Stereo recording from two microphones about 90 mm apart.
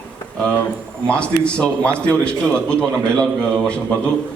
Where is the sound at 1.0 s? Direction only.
10° left (ahead or behind).